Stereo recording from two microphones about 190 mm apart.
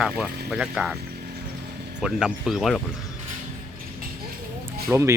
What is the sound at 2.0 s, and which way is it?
Speech, 5° right (ahead or behind).